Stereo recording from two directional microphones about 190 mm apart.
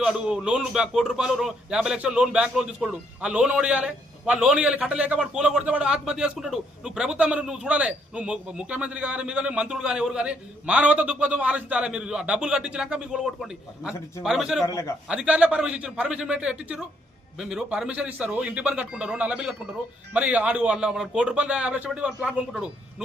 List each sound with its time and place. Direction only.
0.0 s speech: 5° right (ahead or behind)
14.7 s a man's voice: 15° left (ahead or behind)
15.0 s speech: 5° right (ahead or behind)